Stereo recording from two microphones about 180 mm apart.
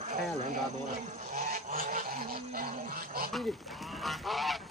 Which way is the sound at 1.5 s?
50° right (ahead or behind).